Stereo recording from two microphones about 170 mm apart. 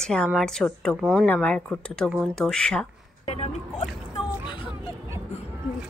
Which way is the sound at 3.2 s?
40° left (ahead or behind).